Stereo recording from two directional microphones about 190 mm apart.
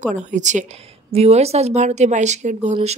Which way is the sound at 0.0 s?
40° right (ahead or behind).